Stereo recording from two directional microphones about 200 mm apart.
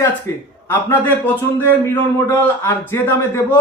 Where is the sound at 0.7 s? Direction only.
10° left (ahead or behind).